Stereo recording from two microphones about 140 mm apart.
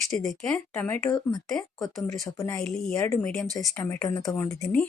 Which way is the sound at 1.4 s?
Centre (ahead or behind).